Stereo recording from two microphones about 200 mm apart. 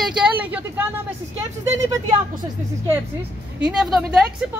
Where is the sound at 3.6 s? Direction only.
5° right (ahead or behind).